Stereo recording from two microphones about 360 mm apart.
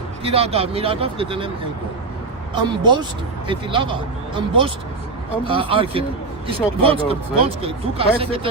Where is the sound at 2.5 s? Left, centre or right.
Centre.